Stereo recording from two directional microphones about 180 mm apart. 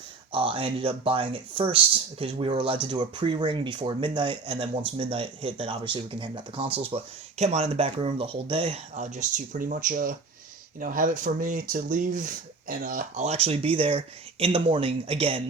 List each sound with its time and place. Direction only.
0.3 s speech: 30° right (ahead or behind)